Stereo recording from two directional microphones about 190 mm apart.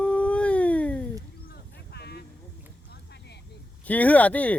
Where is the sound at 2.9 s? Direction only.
60° left (ahead or behind).